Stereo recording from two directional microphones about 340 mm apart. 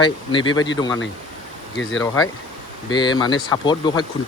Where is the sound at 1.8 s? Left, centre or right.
Left.